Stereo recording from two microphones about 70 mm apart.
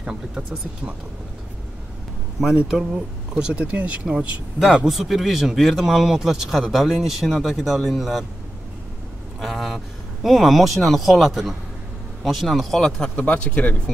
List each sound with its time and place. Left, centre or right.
0.4 s speech: right
2.4 s speech: centre
4.7 s speech: centre
9.4 s a sound: centre
10.2 s speech: centre
13.1 s speech: centre